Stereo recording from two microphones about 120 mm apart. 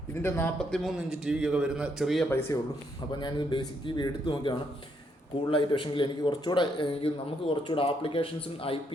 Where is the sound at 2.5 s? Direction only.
30° left (ahead or behind).